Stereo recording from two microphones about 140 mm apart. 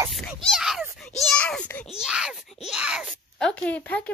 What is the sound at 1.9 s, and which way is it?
A child's voice, 5° right (ahead or behind).